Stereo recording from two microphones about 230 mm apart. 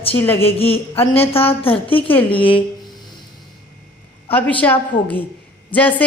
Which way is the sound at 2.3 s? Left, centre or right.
Left.